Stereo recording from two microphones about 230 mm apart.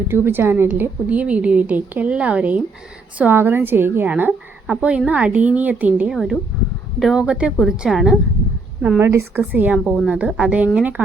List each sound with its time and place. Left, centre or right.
0.1 s a woman's voice: centre